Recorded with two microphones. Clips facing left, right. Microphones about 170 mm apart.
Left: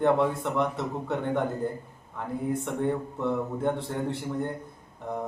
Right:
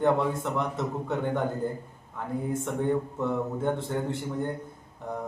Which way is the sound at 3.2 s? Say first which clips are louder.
Even; centre (ahead or behind).